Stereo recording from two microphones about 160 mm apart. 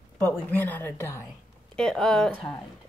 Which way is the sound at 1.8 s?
5° left (ahead or behind).